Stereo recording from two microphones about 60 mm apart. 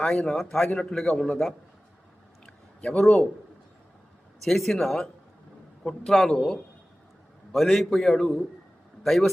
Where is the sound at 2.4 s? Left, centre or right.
Centre.